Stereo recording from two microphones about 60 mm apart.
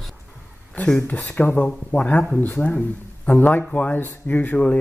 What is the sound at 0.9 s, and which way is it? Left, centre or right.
Speech, left.